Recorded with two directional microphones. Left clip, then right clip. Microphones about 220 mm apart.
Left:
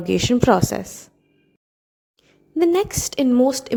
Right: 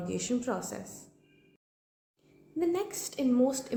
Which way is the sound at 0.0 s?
40° left (ahead or behind).